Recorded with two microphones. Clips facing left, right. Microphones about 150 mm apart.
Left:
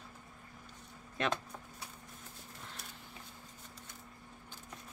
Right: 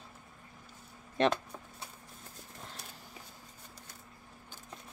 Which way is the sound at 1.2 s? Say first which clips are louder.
Right 7 dB; 35° right (ahead or behind).